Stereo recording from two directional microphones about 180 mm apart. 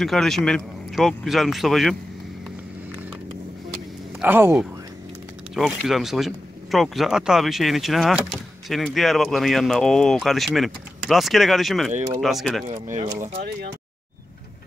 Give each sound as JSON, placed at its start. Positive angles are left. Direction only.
{"t": 0.0, "sound": "speech", "side_deg": 0}
{"t": 4.2, "sound": "speech", "side_deg": -10}
{"t": 5.5, "sound": "speech", "side_deg": 0}
{"t": 12.6, "sound": "speech", "side_deg": -40}
{"t": 13.2, "sound": "speech", "side_deg": -55}